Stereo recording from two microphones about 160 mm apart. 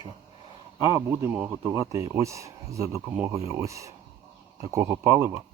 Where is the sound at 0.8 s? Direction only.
20° right (ahead or behind).